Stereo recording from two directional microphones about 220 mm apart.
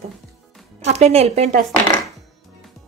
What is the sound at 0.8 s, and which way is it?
Speech, 30° right (ahead or behind).